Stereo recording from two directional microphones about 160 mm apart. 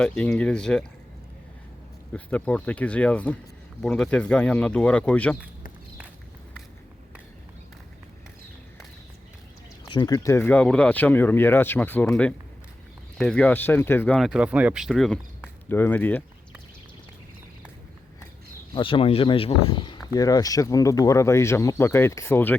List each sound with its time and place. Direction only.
0.0 s speech: 5° left (ahead or behind)
2.1 s speech: 10° left (ahead or behind)
9.9 s speech: 25° left (ahead or behind)
14.2 s speech: 5° right (ahead or behind)
15.7 s speech: 10° left (ahead or behind)
18.7 s speech: 30° left (ahead or behind); by 22.5 s 15° left (ahead or behind)